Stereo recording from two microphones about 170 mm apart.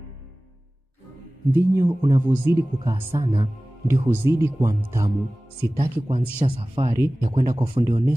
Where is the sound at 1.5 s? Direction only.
15° right (ahead or behind).